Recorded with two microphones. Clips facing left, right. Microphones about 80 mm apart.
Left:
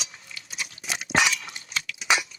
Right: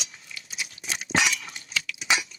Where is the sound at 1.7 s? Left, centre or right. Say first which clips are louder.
Left 2 dB; left.